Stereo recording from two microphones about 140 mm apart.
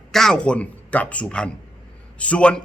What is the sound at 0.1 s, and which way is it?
A man's voice, 5° left (ahead or behind).